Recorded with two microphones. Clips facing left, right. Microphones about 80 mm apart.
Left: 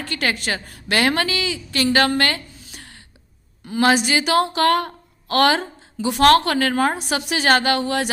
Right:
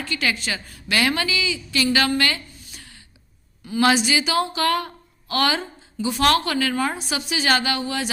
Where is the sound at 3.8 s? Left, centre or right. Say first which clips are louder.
Left 2 dB; left.